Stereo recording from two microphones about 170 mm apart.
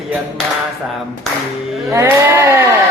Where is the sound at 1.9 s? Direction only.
15° right (ahead or behind).